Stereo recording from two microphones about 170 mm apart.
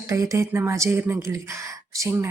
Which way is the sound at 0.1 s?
20° right (ahead or behind).